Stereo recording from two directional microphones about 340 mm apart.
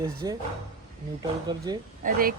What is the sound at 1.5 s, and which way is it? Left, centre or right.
Speech, centre.